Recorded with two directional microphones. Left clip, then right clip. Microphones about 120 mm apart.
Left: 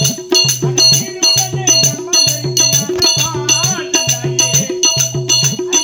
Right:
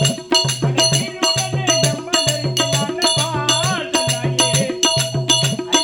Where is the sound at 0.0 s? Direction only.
20° right (ahead or behind).